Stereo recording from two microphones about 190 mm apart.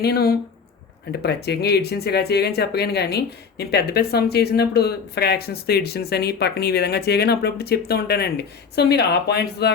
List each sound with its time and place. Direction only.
0.0 s speech: 55° left (ahead or behind)